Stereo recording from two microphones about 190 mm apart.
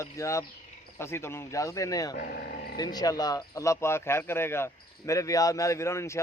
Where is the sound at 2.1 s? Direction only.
45° left (ahead or behind).